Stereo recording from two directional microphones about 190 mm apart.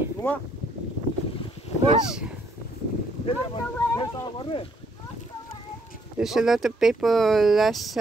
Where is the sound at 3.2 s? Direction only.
20° left (ahead or behind).